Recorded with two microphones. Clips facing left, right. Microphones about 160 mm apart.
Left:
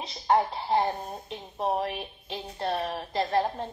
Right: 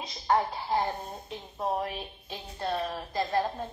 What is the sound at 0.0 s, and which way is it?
A woman's voice, 25° left (ahead or behind).